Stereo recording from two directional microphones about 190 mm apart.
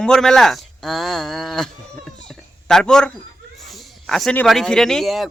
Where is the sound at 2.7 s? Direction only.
5° left (ahead or behind).